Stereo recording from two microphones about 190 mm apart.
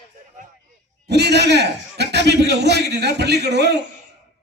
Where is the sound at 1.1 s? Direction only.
60° right (ahead or behind).